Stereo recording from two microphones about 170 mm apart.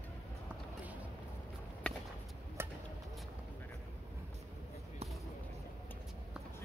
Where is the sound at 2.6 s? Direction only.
15° right (ahead or behind).